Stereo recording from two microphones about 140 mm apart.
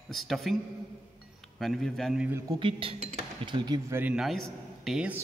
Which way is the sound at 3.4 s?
30° right (ahead or behind).